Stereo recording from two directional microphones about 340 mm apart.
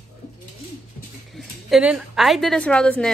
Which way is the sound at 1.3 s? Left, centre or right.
Centre.